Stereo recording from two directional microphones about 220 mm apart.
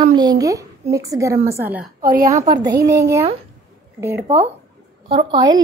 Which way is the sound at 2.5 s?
20° right (ahead or behind).